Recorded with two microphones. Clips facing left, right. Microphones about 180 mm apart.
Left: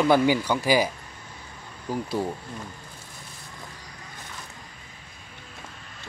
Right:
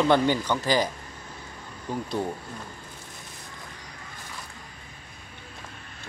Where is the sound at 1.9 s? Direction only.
5° left (ahead or behind).